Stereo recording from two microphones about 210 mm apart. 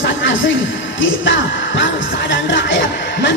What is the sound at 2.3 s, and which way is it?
Speech, 60° left (ahead or behind).